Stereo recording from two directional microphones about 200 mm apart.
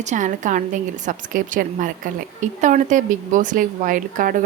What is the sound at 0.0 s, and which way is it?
A woman's voice, 35° right (ahead or behind).